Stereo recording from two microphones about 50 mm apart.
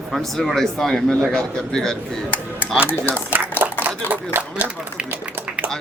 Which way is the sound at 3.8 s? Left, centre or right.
Right.